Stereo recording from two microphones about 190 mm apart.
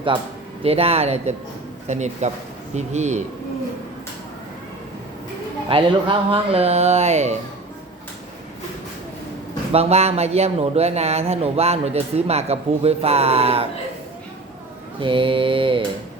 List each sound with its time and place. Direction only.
0.1 s mantra: 25° right (ahead or behind)
0.6 s speech: 30° right (ahead or behind)
5.6 s speech: 30° right (ahead or behind)
9.7 s speech: 35° right (ahead or behind)
15.0 s mantra: 25° right (ahead or behind)